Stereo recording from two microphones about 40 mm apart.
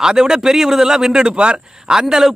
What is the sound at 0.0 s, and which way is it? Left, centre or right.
A man's voice, centre.